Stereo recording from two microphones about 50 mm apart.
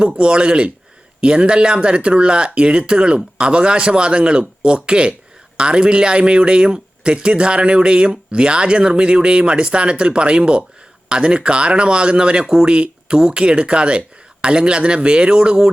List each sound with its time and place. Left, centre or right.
0.2 s speech: centre